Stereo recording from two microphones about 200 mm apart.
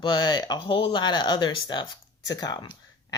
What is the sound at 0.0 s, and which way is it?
Speech, 20° left (ahead or behind).